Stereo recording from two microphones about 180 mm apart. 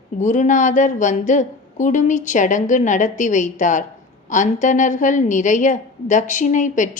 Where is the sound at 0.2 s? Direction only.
45° left (ahead or behind).